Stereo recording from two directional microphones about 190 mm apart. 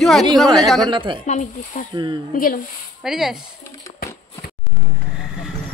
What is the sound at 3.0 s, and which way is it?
Speech, centre (ahead or behind).